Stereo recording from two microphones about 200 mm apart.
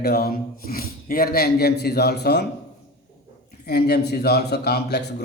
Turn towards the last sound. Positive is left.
turn(degrees=55)  # may be behind; listen again after turning